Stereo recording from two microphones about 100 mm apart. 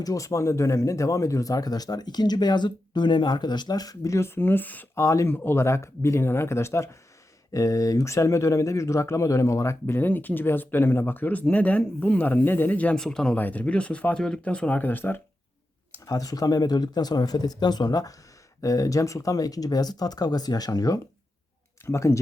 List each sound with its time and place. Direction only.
0.0 s speech: 35° left (ahead or behind); by 5.0 s 15° left (ahead or behind)
5.0 s speech: 30° left (ahead or behind)
16.0 s speech: 40° left (ahead or behind)